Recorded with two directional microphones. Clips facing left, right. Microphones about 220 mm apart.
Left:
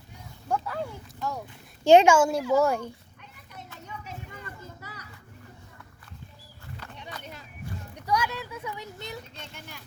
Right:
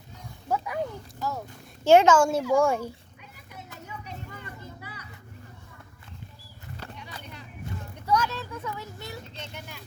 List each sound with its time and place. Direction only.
0.4 s dog: 10° right (ahead or behind)
1.2 s a child's voice: centre (ahead or behind)
1.8 s a child's voice: 15° left (ahead or behind)
4.4 s children playing: 40° left (ahead or behind)
7.9 s a sound: 15° left (ahead or behind)